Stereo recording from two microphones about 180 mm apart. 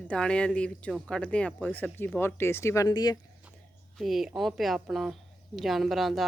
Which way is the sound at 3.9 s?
Centre (ahead or behind).